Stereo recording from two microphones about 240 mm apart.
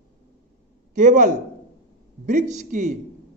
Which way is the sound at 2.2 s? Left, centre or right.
Right.